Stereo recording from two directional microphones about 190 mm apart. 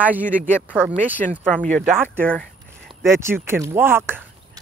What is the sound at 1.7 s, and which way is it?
Speech, centre (ahead or behind).